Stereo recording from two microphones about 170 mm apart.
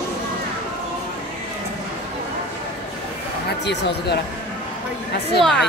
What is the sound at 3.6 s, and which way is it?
Speech, 85° left.